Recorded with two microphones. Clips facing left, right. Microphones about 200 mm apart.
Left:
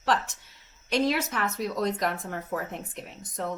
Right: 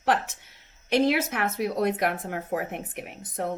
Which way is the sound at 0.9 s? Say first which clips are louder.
Right 3 dB; 60° right (ahead or behind).